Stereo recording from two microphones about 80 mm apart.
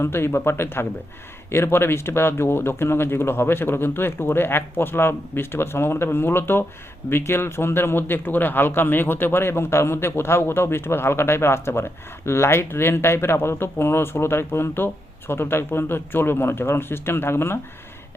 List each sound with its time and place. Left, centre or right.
0.0 s speech: left